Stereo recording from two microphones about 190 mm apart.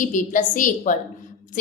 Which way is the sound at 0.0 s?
45° left (ahead or behind).